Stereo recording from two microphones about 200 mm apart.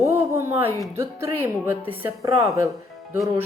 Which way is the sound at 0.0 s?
10° right (ahead or behind).